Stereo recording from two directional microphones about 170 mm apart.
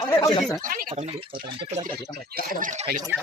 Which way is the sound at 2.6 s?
50° right (ahead or behind).